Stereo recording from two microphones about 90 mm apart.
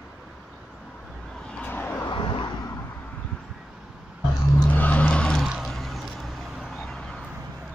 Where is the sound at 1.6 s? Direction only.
15° left (ahead or behind).